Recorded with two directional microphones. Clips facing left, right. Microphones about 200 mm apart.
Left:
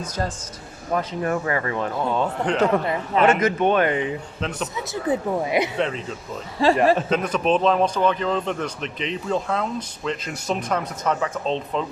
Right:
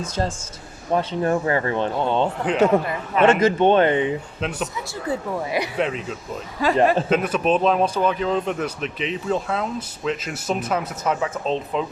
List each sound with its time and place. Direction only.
0.9 s speech: 30° right (ahead or behind)
2.4 s speech: 5° right (ahead or behind)
3.2 s speech: 30° right (ahead or behind)
4.4 s speech: 5° right (ahead or behind)
5.0 s speech: 20° left (ahead or behind)
5.7 s speech: 5° right (ahead or behind)
6.6 s speech: 30° left (ahead or behind)
7.1 s speech: 5° right (ahead or behind)